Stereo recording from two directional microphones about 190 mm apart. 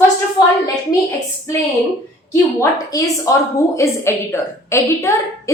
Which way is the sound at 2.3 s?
15° left (ahead or behind).